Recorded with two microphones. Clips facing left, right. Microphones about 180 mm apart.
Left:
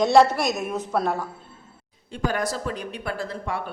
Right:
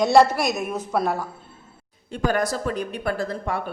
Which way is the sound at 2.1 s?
50° right (ahead or behind).